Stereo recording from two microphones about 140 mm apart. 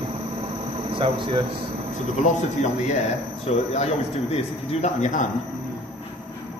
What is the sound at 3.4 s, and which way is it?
Speech, 50° left (ahead or behind).